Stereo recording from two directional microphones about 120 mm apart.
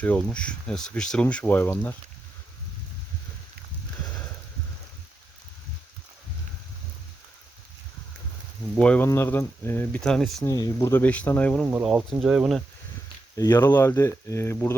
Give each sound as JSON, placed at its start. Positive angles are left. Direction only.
{"t": 0.0, "sound": "speech", "side_deg": 10}
{"t": 8.7, "sound": "speech", "side_deg": 10}
{"t": 9.0, "sound": "speech", "side_deg": 20}
{"t": 10.0, "sound": "speech", "side_deg": 5}
{"t": 10.4, "sound": "speech", "side_deg": 30}
{"t": 11.7, "sound": "speech", "side_deg": -10}
{"t": 13.3, "sound": "speech", "side_deg": 25}